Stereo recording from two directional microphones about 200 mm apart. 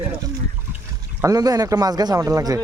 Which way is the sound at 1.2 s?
20° right (ahead or behind).